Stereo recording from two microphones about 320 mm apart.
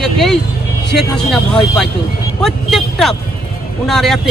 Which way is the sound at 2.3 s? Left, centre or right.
Centre.